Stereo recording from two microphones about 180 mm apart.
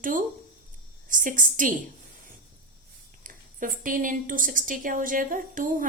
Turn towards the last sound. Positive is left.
turn(degrees=-45)  # may be behind; listen again after turning